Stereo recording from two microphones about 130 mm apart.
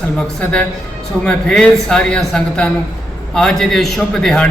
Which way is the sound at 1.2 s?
5° left (ahead or behind).